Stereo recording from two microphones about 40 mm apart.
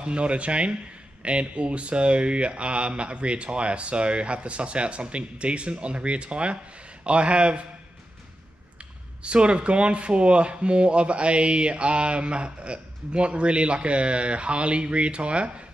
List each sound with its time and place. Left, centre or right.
0.0 s speech: right
9.2 s speech: right